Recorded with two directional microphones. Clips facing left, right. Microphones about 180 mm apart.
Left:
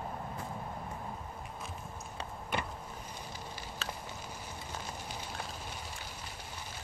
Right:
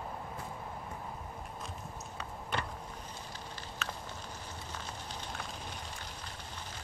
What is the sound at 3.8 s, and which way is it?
Walk, 30° left (ahead or behind).